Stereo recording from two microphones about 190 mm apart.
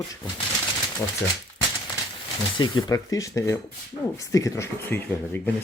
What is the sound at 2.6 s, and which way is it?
Speech, 20° left (ahead or behind).